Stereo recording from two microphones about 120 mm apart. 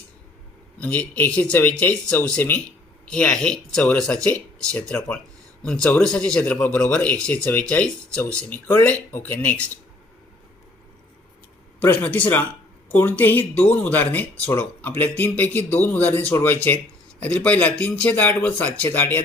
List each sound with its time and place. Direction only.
0.8 s speech: 15° left (ahead or behind)
11.9 s speech: 15° left (ahead or behind)